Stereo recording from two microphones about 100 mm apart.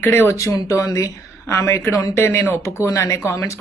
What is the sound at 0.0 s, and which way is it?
Speech, 25° left (ahead or behind).